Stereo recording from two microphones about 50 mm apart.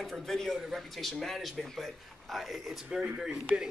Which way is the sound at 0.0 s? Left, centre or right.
Centre.